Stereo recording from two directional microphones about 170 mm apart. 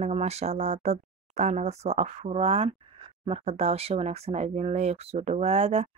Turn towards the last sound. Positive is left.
turn(degrees=-40)  # may be behind; listen again after turning